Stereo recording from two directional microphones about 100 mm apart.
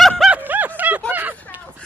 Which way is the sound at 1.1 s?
20° right (ahead or behind).